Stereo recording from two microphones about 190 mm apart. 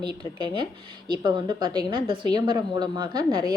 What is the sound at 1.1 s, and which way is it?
A woman's voice, 25° right (ahead or behind).